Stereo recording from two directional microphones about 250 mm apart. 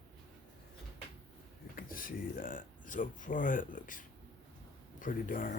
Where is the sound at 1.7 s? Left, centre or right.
Left.